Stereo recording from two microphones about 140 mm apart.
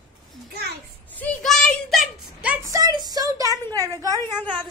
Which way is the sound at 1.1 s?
5° left (ahead or behind).